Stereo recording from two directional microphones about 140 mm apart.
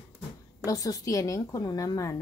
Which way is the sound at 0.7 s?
25° left (ahead or behind).